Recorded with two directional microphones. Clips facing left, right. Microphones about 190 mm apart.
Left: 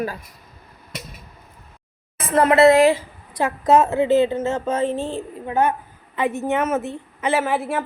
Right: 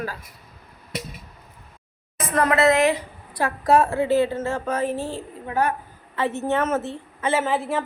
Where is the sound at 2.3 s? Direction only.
25° left (ahead or behind).